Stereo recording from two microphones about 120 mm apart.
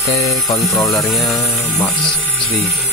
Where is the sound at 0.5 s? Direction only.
15° left (ahead or behind).